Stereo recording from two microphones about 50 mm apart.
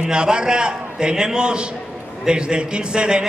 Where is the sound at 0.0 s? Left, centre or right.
Centre.